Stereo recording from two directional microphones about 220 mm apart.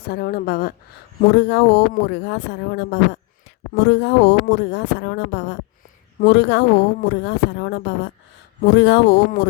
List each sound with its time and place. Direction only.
0.0 s speech: 45° left (ahead or behind)